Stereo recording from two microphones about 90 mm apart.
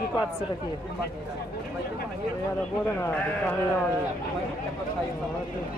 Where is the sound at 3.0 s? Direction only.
20° left (ahead or behind).